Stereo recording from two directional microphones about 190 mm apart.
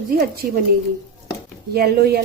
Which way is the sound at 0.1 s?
50° right (ahead or behind).